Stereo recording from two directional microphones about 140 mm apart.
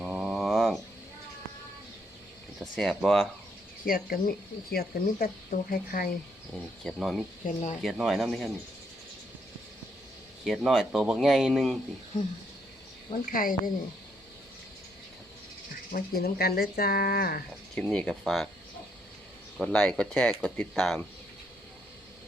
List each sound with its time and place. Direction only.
0.0 s a sound: 5° right (ahead or behind)
2.6 s speech: centre (ahead or behind)
3.8 s speech: 90° left
6.8 s speech: centre (ahead or behind)
7.4 s speech: 60° left (ahead or behind)
7.8 s speech: centre (ahead or behind)
10.4 s speech: centre (ahead or behind)
13.2 s speech: 85° left
15.9 s speech: 90° left
17.7 s speech: 5° left (ahead or behind)
19.5 s speech: 5° left (ahead or behind)